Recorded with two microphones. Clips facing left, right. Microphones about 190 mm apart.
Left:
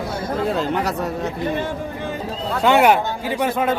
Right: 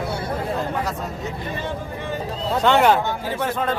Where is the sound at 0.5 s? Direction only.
80° left.